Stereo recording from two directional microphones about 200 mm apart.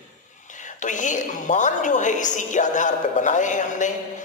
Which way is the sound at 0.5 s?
40° left (ahead or behind).